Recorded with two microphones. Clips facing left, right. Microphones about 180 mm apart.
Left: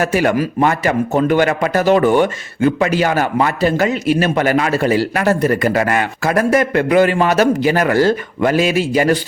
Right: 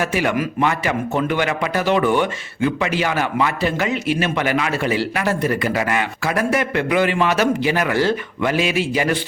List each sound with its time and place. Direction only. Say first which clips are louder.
0.0 s a man's voice: left 5 dB; 45° left (ahead or behind)